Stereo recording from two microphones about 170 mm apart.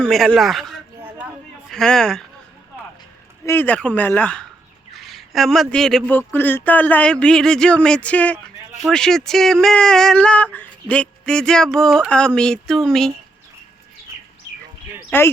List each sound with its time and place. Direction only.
0.0 s speech: centre (ahead or behind)
3.4 s speech: 10° left (ahead or behind)
15.1 s speech: 15° left (ahead or behind)